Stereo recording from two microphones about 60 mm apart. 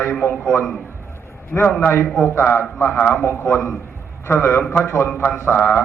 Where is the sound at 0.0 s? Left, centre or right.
Left.